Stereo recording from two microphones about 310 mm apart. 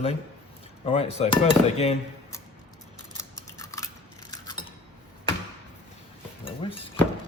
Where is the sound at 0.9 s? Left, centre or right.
Centre.